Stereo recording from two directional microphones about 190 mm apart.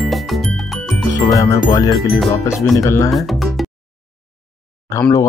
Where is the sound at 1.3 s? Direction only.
20° left (ahead or behind).